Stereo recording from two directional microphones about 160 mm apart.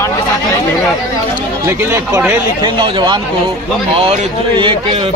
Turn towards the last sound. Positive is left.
turn(degrees=-35)  # may be behind; listen again after turning